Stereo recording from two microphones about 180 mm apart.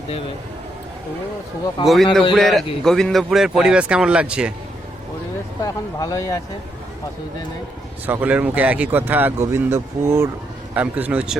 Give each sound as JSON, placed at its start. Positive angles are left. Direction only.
{"t": 1.8, "sound": "a man's voice", "side_deg": 0}
{"t": 5.6, "sound": "speech", "side_deg": 20}
{"t": 8.0, "sound": "speech", "side_deg": -10}